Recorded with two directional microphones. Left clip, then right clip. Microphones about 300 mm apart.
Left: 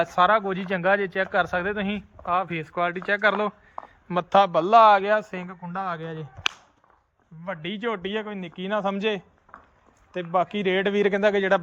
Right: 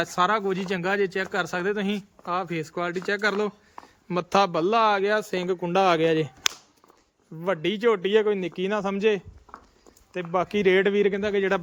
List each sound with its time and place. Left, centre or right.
0.0 s speech: centre
7.4 s speech: centre